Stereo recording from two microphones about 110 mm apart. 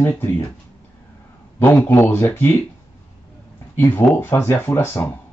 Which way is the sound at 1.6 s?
15° left (ahead or behind).